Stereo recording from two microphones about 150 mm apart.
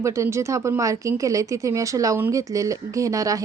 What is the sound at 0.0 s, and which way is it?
A woman's voice, 20° right (ahead or behind).